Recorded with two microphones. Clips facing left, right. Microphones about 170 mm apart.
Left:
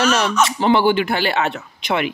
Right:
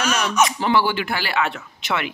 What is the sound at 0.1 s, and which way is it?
Speech, 30° left (ahead or behind).